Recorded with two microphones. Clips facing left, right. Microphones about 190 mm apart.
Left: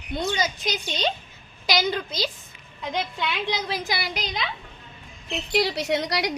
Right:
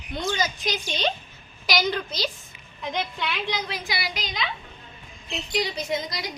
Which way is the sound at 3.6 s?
45° left (ahead or behind).